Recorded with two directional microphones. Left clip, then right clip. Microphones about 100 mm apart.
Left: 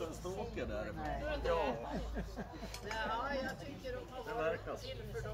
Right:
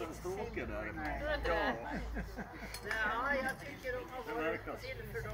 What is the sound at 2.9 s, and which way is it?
Speech, 25° left (ahead or behind).